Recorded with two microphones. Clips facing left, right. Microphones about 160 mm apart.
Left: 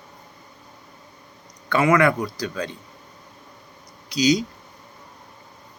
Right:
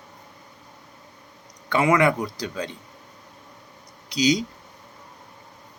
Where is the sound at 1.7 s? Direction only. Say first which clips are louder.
Left 1 dB; 20° right (ahead or behind).